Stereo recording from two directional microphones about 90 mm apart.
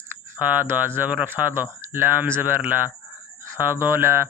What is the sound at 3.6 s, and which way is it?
Speech, 25° right (ahead or behind).